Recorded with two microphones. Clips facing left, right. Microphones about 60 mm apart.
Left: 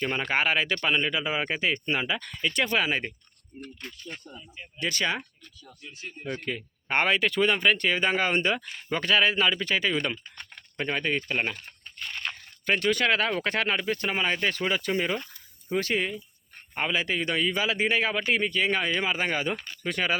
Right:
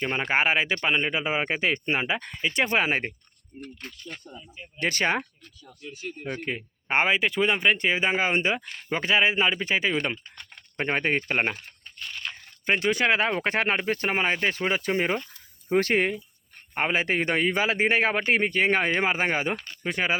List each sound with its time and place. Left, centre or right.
0.0 s speech: centre
2.4 s speech: centre
2.6 s a man's voice: right
4.8 s a man's voice: right
6.2 s a man's voice: right
12.6 s a man's voice: centre; by 16.2 s right
16.7 s a man's voice: right